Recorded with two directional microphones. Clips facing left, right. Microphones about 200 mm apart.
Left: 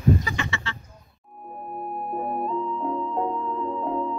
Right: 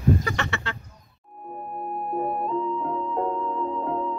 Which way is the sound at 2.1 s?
Centre (ahead or behind).